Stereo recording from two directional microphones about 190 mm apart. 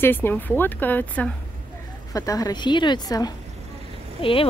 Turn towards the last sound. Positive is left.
turn(degrees=30)  # may be behind; listen again after turning